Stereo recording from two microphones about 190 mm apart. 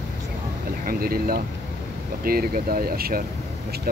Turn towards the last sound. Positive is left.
turn(degrees=-50)  # may be behind; listen again after turning